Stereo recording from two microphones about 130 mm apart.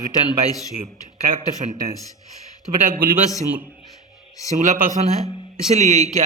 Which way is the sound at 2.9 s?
90° right.